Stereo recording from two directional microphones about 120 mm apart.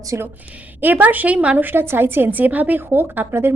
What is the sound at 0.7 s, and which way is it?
A woman's voice, 15° right (ahead or behind).